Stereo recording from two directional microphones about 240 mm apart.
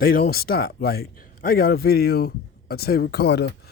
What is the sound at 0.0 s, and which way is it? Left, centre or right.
Speech, left.